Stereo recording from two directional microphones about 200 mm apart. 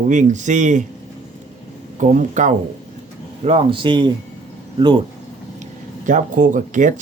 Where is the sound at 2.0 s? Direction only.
40° right (ahead or behind).